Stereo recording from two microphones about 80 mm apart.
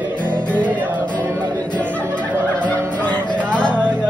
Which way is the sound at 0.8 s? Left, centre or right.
Right.